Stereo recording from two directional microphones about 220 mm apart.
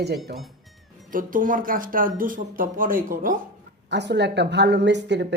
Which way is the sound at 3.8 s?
50° right (ahead or behind).